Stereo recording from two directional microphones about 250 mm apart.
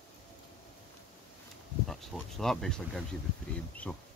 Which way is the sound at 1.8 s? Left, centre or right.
Centre.